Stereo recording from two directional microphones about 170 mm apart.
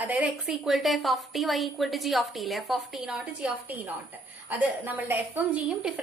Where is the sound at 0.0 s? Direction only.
10° right (ahead or behind).